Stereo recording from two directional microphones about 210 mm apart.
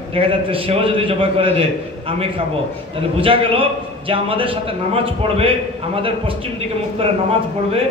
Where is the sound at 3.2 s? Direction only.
25° right (ahead or behind).